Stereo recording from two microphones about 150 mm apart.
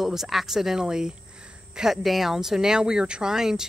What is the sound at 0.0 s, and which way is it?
Speech, centre (ahead or behind).